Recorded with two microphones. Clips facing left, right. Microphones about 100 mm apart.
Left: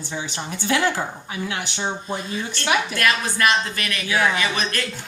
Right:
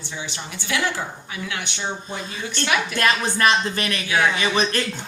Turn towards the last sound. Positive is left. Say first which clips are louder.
# right 2 dB
turn(degrees=-25)  # may be behind; listen again after turning